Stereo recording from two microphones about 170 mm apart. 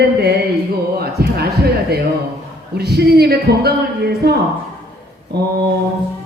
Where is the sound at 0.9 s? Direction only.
65° right (ahead or behind).